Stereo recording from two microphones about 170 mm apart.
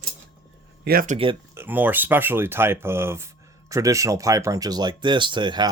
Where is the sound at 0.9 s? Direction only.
60° right (ahead or behind).